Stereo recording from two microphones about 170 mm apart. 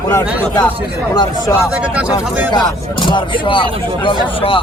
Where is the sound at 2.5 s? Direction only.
25° left (ahead or behind).